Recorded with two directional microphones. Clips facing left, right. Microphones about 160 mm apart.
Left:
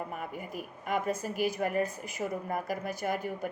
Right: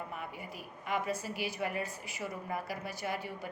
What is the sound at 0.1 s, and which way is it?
A woman's voice, 50° left (ahead or behind).